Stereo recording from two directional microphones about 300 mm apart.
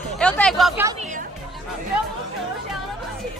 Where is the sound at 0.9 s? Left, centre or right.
Right.